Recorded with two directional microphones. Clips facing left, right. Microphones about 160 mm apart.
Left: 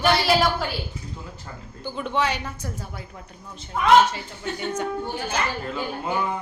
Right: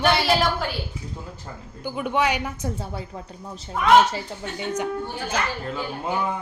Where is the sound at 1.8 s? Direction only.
15° right (ahead or behind).